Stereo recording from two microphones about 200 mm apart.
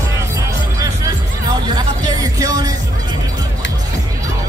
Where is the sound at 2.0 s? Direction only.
20° right (ahead or behind).